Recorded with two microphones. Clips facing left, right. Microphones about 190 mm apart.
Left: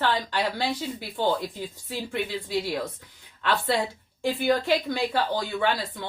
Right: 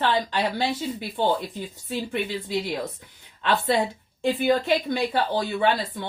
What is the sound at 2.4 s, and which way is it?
Speech, 20° right (ahead or behind).